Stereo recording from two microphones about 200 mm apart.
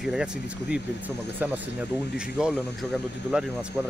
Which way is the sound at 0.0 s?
5° right (ahead or behind).